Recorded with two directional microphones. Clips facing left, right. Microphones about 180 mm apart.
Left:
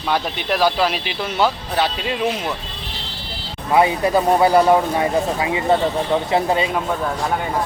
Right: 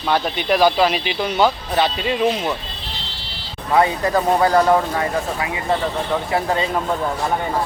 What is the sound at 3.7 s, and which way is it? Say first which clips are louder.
Speech: left 1 dB; 15° left (ahead or behind).